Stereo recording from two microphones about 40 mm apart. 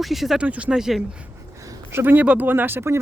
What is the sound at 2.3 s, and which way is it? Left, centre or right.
Speech, right.